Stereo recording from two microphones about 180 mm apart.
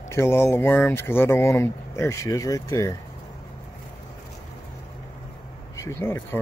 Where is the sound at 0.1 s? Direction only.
15° left (ahead or behind).